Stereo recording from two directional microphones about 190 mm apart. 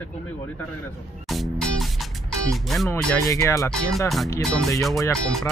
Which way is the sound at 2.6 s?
Centre (ahead or behind).